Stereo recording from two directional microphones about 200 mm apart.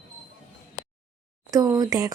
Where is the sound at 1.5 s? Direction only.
20° right (ahead or behind).